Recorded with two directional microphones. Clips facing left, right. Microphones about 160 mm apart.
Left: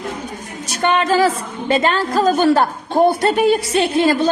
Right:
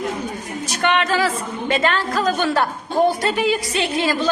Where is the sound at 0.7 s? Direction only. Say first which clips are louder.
Left 3 dB; 35° left (ahead or behind).